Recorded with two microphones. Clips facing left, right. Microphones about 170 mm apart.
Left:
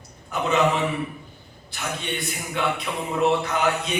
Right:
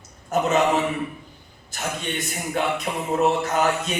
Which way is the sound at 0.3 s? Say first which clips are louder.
Right 5 dB; 45° right (ahead or behind).